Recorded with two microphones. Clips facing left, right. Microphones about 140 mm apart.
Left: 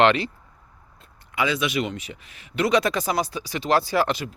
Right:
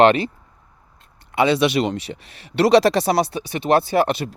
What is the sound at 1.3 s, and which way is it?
Speech, 30° right (ahead or behind).